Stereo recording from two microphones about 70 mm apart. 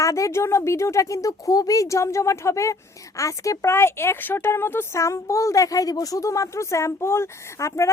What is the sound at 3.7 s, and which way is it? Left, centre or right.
A woman's voice, left.